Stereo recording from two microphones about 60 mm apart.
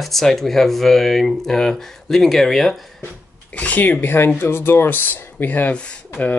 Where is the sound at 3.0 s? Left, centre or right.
Left.